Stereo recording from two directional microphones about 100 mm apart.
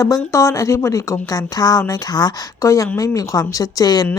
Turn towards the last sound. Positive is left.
turn(degrees=40)  # may be behind; listen again after turning